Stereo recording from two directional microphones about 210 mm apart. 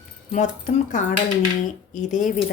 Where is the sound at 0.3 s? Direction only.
35° left (ahead or behind).